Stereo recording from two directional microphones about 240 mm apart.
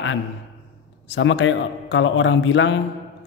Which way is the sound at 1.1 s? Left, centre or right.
Left.